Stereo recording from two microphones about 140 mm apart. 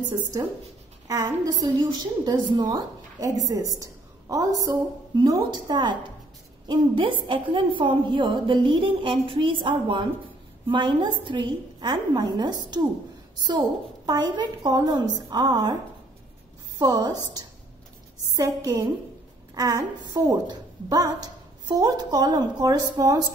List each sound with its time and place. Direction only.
0.1 s a woman's voice: 25° right (ahead or behind)
16.7 s a woman's voice: 30° right (ahead or behind)